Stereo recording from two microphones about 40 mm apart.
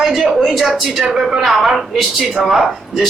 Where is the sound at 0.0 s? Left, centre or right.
Centre.